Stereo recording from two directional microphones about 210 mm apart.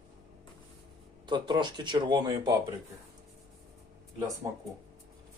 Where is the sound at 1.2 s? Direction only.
20° right (ahead or behind).